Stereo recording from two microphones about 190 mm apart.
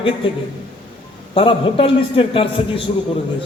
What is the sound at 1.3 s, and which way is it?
A man's voice, 25° left (ahead or behind).